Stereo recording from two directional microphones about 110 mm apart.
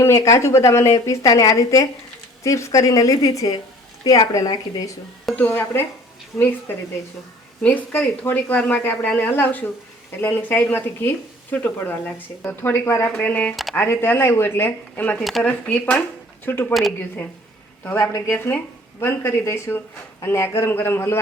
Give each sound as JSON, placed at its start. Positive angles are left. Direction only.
{"t": 0.0, "sound": "a woman's voice", "side_deg": 25}
{"t": 5.4, "sound": "a woman's voice", "side_deg": 20}
{"t": 7.6, "sound": "a woman's voice", "side_deg": 15}
{"t": 15.2, "sound": "speech", "side_deg": 0}
{"t": 15.4, "sound": "speech", "side_deg": 10}
{"t": 17.8, "sound": "a woman's voice", "side_deg": 15}